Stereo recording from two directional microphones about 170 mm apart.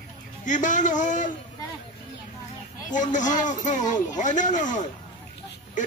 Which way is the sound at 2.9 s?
45° left (ahead or behind).